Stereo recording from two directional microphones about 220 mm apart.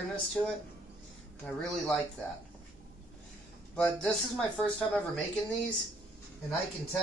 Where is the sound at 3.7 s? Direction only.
5° left (ahead or behind).